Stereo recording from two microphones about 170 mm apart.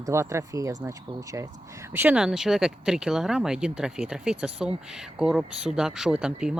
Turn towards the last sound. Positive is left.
turn(degrees=-5)  # may be behind; listen again after turning